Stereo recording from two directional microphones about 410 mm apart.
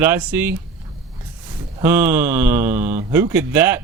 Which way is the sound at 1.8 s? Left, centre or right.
Centre.